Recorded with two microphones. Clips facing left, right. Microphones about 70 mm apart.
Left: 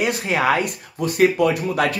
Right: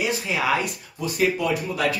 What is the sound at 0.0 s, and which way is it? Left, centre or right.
Speech, left.